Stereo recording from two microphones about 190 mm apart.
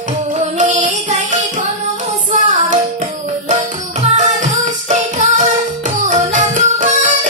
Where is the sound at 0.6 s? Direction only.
40° right (ahead or behind).